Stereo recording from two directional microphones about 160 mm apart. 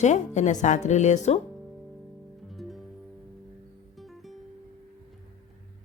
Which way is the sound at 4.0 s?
Centre (ahead or behind).